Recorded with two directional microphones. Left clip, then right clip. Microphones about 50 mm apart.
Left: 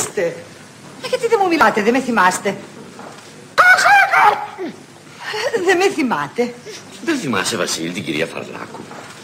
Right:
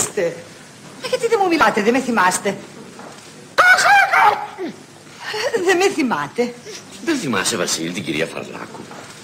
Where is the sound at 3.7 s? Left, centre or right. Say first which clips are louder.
Left 1 dB; right.